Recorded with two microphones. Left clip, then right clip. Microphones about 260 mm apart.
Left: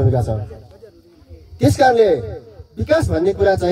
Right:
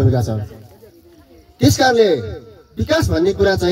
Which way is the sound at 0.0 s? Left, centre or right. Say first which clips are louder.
Even; right.